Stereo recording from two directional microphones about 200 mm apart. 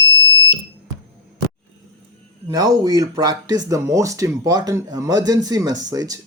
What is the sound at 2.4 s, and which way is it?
Speech, 20° right (ahead or behind).